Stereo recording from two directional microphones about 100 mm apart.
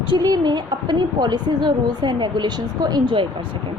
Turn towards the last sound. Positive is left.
turn(degrees=-50)  # may be behind; listen again after turning